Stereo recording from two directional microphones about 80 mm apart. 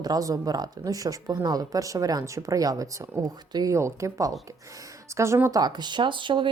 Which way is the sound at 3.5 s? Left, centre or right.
Right.